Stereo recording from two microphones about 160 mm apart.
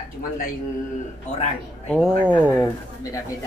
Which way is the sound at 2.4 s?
10° left (ahead or behind).